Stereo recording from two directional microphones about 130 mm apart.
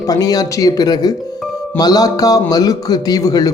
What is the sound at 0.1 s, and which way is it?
A man's voice, 30° left (ahead or behind).